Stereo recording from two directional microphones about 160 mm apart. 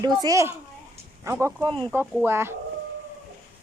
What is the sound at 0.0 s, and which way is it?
Speech, 25° right (ahead or behind).